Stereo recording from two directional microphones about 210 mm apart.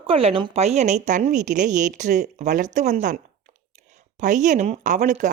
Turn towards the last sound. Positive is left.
turn(degrees=-35)  # may be behind; listen again after turning